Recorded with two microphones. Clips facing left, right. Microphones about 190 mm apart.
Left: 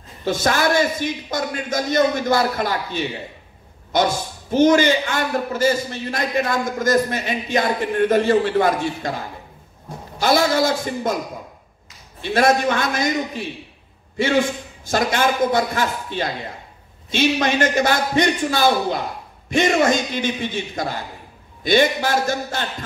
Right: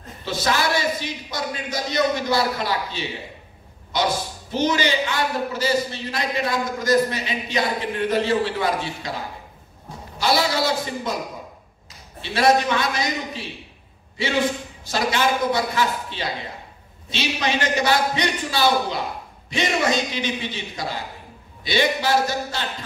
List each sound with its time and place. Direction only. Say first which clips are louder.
0.2 s a man's voice: left 4 dB; 50° left (ahead or behind)
10.2 s a man's voice: left 4 dB; 50° left (ahead or behind)
12.2 s a man's voice: left 1 dB; 50° left (ahead or behind)
14.9 s a man's voice: left 2 dB; 50° left (ahead or behind)